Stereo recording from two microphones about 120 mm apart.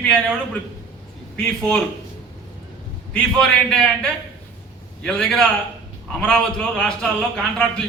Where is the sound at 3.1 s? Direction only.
5° left (ahead or behind).